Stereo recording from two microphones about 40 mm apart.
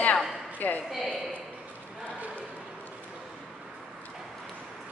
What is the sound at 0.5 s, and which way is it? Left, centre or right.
Speech, left.